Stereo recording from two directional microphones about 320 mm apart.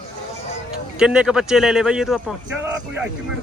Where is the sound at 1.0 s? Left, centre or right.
Centre.